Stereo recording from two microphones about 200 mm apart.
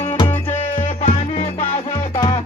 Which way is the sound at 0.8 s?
25° left (ahead or behind).